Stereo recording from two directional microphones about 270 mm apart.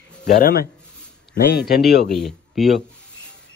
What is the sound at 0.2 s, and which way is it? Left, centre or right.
Speech, left.